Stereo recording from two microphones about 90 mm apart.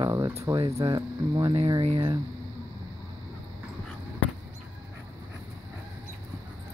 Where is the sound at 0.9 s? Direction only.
50° right (ahead or behind).